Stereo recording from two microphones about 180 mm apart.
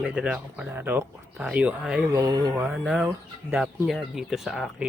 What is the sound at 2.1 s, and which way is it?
Speech, 20° right (ahead or behind).